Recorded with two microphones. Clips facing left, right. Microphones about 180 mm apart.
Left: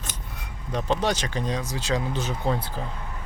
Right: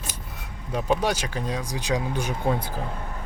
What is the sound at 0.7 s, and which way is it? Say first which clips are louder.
Speech: right 1 dB; 10° right (ahead or behind).